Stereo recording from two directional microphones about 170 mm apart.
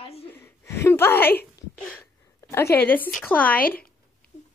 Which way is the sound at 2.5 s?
10° left (ahead or behind).